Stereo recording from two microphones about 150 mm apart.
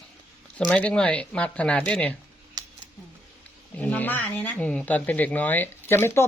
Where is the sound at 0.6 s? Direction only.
10° left (ahead or behind).